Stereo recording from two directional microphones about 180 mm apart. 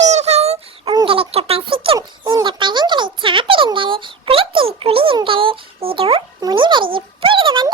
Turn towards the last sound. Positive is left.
turn(degrees=-25)  # may be behind; listen again after turning